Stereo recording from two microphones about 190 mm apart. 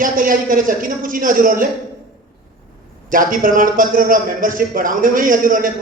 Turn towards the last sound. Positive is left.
turn(degrees=-45)  # may be behind; listen again after turning